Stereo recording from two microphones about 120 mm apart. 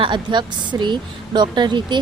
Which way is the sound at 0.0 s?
40° right (ahead or behind).